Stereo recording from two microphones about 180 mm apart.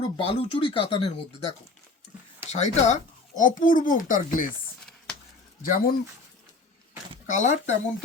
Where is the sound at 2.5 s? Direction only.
40° left (ahead or behind).